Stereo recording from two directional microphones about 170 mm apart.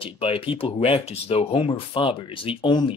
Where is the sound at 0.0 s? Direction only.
30° left (ahead or behind).